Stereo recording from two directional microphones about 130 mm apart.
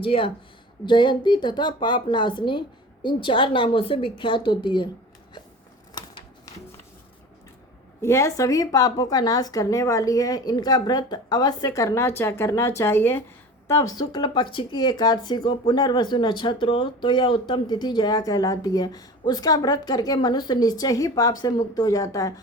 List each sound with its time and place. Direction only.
0.0 s speech: 40° left (ahead or behind)
6.0 s a sound: 30° left (ahead or behind)
8.0 s speech: 20° left (ahead or behind)